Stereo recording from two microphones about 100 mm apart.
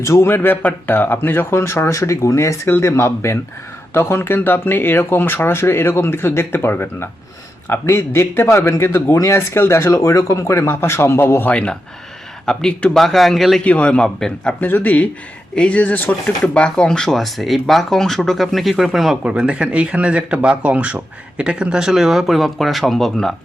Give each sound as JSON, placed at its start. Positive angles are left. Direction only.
{"t": 0.0, "sound": "speech", "side_deg": 30}
{"t": 11.5, "sound": "a man's voice", "side_deg": 10}
{"t": 13.7, "sound": "a man's voice", "side_deg": 10}
{"t": 14.6, "sound": "a man's voice", "side_deg": 20}